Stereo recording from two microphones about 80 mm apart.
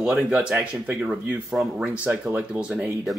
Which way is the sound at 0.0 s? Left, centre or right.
Centre.